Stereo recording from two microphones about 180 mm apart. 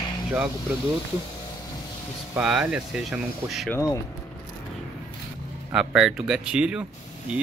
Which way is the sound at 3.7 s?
15° left (ahead or behind).